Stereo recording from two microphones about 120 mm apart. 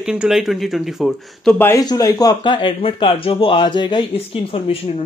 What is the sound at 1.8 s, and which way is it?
Speech, 30° left (ahead or behind).